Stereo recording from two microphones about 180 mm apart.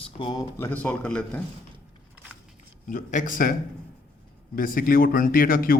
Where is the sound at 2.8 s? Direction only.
45° left (ahead or behind).